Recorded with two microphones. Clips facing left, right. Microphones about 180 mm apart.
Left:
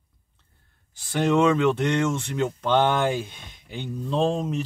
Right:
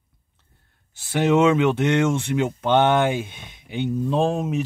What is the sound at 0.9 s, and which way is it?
Speech, 5° right (ahead or behind).